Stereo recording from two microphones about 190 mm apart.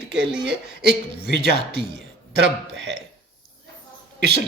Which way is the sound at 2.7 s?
65° right (ahead or behind).